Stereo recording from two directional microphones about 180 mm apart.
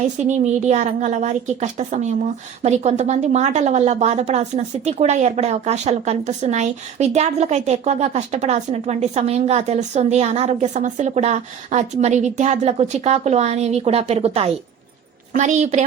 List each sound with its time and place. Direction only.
0.0 s speech: 40° right (ahead or behind)